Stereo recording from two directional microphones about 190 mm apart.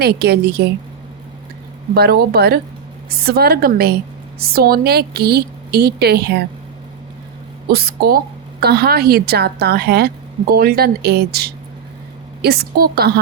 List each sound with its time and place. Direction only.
0.0 s a woman's voice: 60° right (ahead or behind)
2.0 s a woman's voice: 55° right (ahead or behind)
7.7 s a woman's voice: 55° right (ahead or behind)